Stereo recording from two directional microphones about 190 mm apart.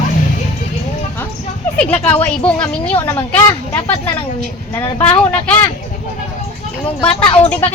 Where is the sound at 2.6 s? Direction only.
5° left (ahead or behind).